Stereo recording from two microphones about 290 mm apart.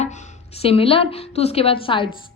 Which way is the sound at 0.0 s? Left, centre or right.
Left.